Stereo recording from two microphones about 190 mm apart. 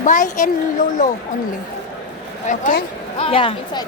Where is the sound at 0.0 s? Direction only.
40° left (ahead or behind).